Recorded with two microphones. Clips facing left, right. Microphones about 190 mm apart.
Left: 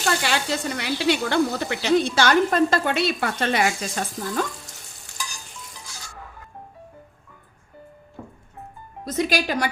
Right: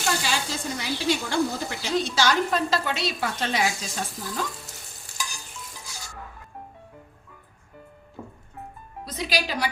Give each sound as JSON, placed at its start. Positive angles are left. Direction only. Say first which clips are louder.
{"t": 0.2, "sound": "speech", "louder": "left 4 dB", "side_deg": 65}
{"t": 9.0, "sound": "speech", "louder": "left 6 dB", "side_deg": 50}